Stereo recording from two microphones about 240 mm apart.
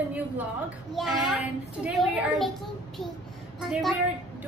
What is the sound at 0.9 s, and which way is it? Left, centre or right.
A child's voice, centre.